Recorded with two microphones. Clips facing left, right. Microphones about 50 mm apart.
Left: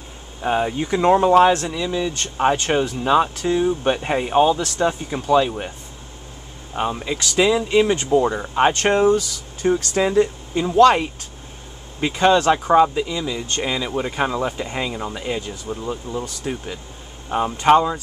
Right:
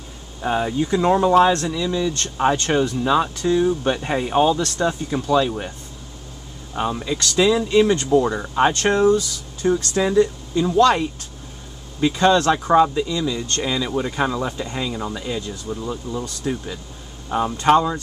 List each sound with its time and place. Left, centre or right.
0.4 s speech: centre
4.8 s speech: centre
6.7 s speech: centre
15.2 s speech: left